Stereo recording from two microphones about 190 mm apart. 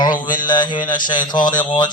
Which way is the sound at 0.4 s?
25° left (ahead or behind).